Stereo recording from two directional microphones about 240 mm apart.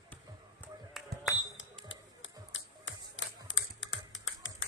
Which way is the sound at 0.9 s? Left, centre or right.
Centre.